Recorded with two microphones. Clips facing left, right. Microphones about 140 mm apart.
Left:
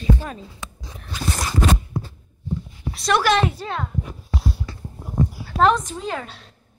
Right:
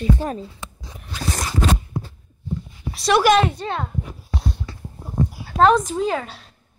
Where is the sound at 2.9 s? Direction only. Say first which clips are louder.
Right 3 dB; centre (ahead or behind).